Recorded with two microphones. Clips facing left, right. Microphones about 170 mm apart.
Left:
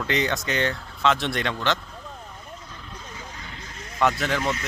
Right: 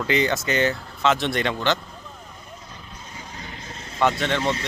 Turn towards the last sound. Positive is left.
turn(degrees=0)  # may be behind; listen again after turning